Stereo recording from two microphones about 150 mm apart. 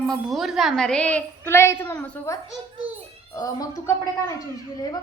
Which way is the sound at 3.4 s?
20° left (ahead or behind).